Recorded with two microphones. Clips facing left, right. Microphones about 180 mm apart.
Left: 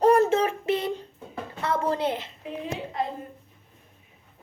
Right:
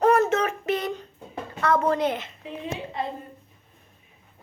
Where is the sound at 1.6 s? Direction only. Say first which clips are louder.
Right 3 dB; 30° left (ahead or behind).